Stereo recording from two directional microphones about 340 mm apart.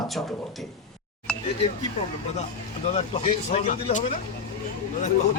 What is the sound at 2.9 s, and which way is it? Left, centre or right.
Speech, centre.